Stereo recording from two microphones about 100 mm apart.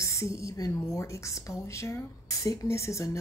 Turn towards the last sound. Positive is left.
turn(degrees=30)  # may be behind; listen again after turning